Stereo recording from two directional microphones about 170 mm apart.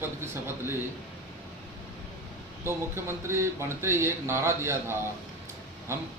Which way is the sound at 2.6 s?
15° right (ahead or behind).